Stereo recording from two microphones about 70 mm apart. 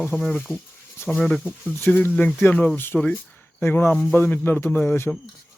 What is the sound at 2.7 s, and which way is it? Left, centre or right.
Speech, left.